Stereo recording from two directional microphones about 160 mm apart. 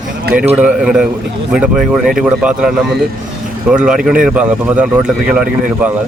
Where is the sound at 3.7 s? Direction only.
5° right (ahead or behind).